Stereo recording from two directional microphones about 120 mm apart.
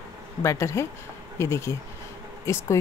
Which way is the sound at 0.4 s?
25° left (ahead or behind).